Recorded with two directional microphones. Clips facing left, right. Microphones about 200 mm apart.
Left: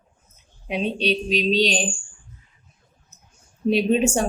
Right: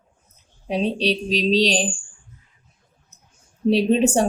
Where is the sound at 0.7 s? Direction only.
35° right (ahead or behind).